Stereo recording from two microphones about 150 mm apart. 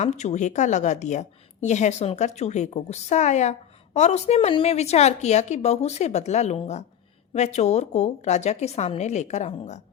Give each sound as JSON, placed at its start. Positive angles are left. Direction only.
{"t": 0.0, "sound": "a woman's voice", "side_deg": 50}